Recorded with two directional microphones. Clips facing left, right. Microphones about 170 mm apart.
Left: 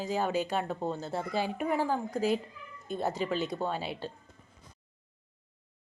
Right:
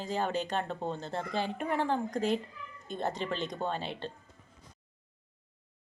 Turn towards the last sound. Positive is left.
turn(degrees=5)  # may be behind; listen again after turning